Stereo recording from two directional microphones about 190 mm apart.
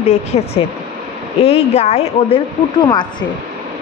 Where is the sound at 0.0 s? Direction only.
35° left (ahead or behind).